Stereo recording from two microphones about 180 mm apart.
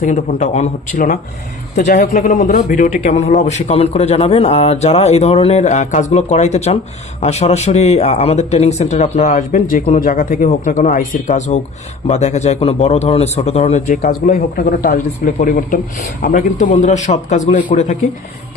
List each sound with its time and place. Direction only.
0.0 s a man's voice: 45° left (ahead or behind)